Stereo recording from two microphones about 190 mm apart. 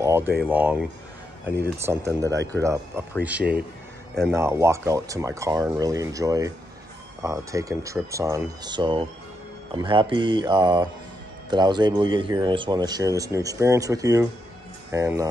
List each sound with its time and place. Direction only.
0.4 s speech: 10° right (ahead or behind)